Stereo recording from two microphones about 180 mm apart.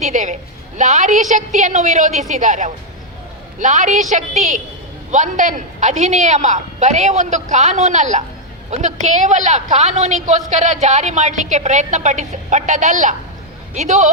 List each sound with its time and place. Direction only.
0.0 s a woman's voice: 45° right (ahead or behind)